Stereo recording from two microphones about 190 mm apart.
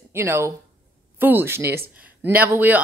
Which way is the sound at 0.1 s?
15° right (ahead or behind).